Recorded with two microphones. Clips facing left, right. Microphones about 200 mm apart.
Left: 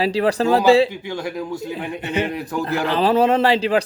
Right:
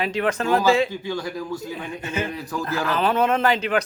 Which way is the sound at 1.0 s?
20° left (ahead or behind).